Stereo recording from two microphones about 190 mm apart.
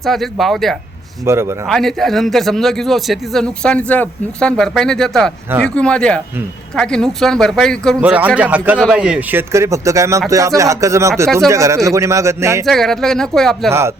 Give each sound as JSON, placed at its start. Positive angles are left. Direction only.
{"t": 0.0, "sound": "a man's voice", "side_deg": 0}
{"t": 1.2, "sound": "speech", "side_deg": -15}
{"t": 1.6, "sound": "a man's voice", "side_deg": 0}
{"t": 8.0, "sound": "speech", "side_deg": -5}
{"t": 12.6, "sound": "a man's voice", "side_deg": 0}
{"t": 13.7, "sound": "speech", "side_deg": -15}